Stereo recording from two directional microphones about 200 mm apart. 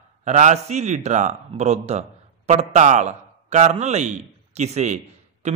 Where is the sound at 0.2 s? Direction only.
35° right (ahead or behind).